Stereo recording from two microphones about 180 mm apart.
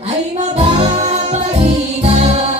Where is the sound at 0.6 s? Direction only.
35° right (ahead or behind).